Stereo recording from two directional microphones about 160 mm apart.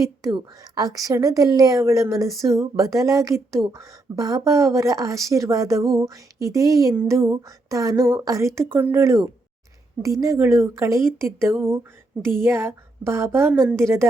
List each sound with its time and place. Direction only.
0.0 s a woman's voice: 20° right (ahead or behind)